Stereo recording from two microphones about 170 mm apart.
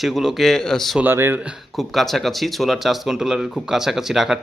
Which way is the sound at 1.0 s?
15° right (ahead or behind).